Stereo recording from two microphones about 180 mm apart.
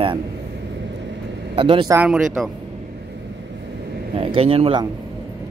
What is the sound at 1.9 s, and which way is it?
Speech, 5° right (ahead or behind).